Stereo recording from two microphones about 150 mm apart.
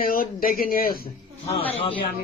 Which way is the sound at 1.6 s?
40° left (ahead or behind).